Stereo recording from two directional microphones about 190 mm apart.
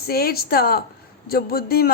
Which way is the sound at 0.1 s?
55° left (ahead or behind).